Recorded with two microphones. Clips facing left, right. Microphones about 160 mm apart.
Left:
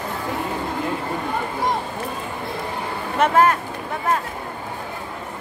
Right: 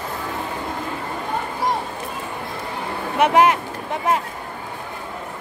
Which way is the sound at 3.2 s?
15° right (ahead or behind).